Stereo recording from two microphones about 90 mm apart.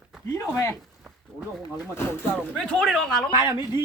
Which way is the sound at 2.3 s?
5° left (ahead or behind).